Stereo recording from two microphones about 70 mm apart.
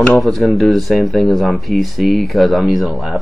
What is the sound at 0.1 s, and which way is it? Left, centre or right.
Speech, centre.